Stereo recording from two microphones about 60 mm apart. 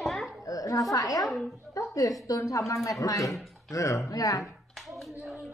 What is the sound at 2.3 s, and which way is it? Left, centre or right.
A woman's voice, left.